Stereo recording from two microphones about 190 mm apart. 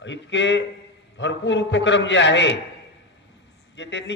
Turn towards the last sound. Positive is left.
turn(degrees=65)  # may be behind; listen again after turning